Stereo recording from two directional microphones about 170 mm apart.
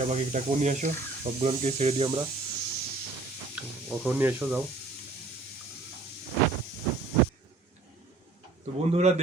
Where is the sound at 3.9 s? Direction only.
10° right (ahead or behind).